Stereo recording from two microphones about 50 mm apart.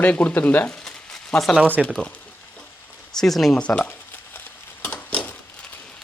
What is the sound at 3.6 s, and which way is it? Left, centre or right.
Speech, left.